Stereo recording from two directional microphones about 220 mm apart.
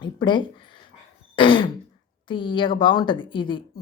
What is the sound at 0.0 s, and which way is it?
A woman's voice, 20° left (ahead or behind).